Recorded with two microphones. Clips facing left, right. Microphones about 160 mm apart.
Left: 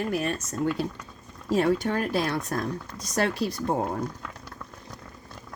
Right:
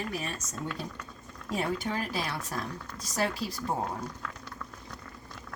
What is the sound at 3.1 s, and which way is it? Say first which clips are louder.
Speech: left 5 dB; 70° left (ahead or behind).